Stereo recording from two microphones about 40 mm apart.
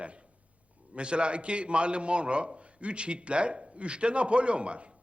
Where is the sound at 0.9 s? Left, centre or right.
Right.